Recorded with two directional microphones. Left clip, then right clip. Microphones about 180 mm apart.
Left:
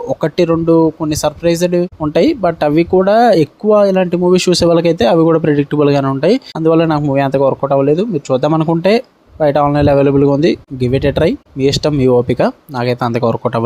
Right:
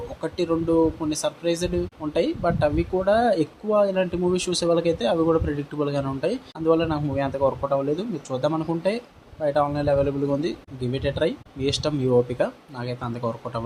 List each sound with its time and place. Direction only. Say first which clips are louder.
0.1 s speech: left 13 dB; 50° left (ahead or behind)